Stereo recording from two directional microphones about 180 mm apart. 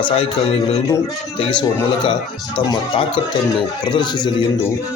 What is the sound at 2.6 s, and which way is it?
A man's voice, 25° left (ahead or behind).